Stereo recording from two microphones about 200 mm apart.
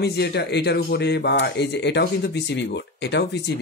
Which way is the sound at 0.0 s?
55° left (ahead or behind).